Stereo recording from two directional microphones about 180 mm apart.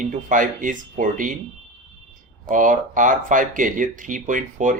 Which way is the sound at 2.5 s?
45° right (ahead or behind).